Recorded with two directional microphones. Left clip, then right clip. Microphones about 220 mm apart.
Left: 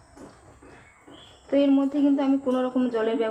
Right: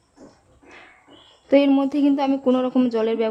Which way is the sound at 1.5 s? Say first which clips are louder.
Right 5 dB; 55° right (ahead or behind).